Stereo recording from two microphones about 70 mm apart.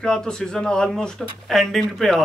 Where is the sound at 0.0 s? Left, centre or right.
Centre.